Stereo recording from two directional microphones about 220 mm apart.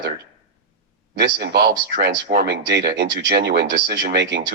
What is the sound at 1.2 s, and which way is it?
Speech, 50° right (ahead or behind).